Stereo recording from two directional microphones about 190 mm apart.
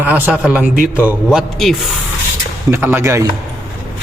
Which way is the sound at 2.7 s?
10° right (ahead or behind).